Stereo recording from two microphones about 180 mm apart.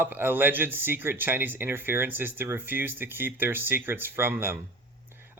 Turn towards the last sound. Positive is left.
turn(degrees=-10)  # may be behind; listen again after turning